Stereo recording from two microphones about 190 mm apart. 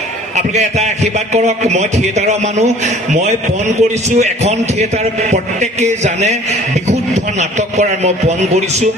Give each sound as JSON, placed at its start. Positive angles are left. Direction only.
{"t": 0.4, "sound": "a man's voice", "side_deg": -35}